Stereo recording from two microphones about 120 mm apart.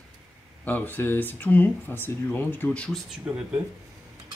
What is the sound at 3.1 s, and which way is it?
Speech, 10° right (ahead or behind).